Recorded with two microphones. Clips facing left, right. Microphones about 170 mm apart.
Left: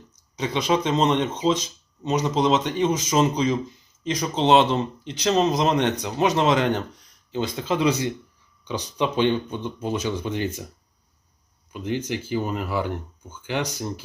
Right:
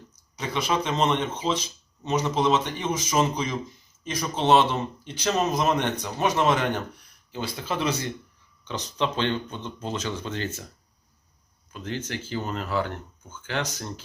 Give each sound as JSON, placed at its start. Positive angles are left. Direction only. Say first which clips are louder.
{"t": 0.2, "sound": "speech", "louder": "left 3 dB", "side_deg": 20}
{"t": 11.7, "sound": "speech", "louder": "left 5 dB", "side_deg": 15}